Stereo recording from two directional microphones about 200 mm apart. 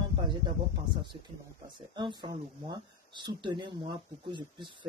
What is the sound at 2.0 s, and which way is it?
Speech, 20° right (ahead or behind).